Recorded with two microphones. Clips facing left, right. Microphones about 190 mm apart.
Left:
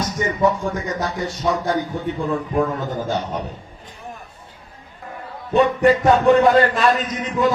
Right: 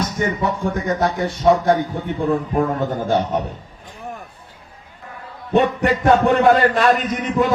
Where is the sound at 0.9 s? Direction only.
60° right (ahead or behind).